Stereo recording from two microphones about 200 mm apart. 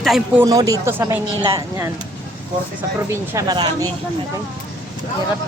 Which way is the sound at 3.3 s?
15° right (ahead or behind).